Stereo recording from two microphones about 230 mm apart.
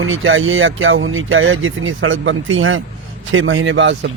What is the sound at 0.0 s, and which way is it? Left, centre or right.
Speech, right.